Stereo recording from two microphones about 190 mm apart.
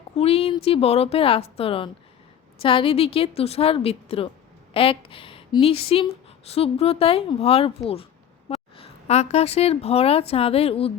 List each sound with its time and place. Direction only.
0.2 s a woman's voice: 30° left (ahead or behind)